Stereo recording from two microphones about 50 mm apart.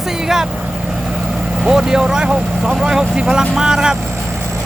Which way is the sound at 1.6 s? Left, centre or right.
Centre.